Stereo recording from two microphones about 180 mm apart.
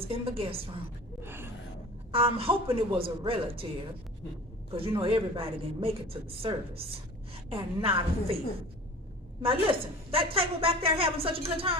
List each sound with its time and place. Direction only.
0.0 s a woman's voice: 30° right (ahead or behind)
1.2 s a sound: 10° right (ahead or behind)
2.1 s a woman's voice: 30° right (ahead or behind)
4.7 s a woman's voice: 30° right (ahead or behind)
9.4 s a woman's voice: 30° right (ahead or behind)